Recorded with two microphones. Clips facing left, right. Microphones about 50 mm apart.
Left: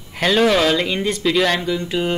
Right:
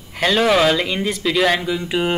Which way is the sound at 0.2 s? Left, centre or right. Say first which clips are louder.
Even; centre.